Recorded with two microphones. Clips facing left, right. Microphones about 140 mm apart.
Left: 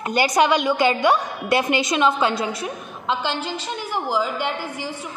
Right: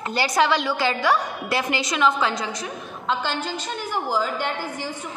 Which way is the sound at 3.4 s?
10° left (ahead or behind).